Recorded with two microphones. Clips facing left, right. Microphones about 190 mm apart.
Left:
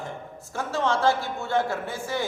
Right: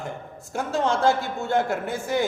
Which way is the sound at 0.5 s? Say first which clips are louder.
Right 2 dB; 15° right (ahead or behind).